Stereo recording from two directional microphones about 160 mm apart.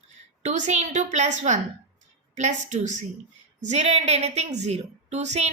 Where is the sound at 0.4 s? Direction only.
45° right (ahead or behind).